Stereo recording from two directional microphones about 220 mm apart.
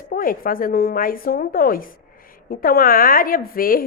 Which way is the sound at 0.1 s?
40° left (ahead or behind).